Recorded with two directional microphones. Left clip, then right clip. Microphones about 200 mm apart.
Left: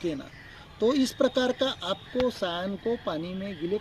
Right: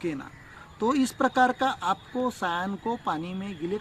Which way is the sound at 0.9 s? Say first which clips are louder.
Even; 25° right (ahead or behind).